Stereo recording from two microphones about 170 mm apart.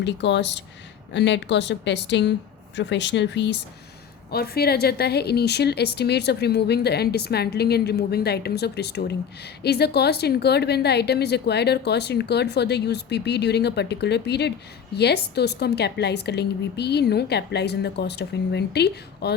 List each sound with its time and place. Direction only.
0.0 s speech: 90° left
4.3 s a woman's voice: 65° left (ahead or behind)